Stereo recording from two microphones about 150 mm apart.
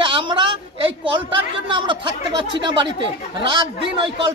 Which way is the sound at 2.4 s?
30° right (ahead or behind).